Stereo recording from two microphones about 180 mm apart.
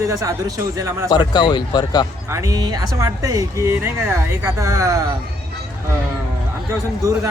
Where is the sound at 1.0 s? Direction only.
25° left (ahead or behind).